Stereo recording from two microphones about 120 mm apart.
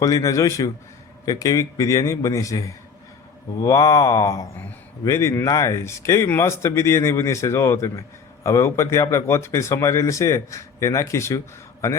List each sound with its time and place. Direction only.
0.0 s speech: 30° left (ahead or behind)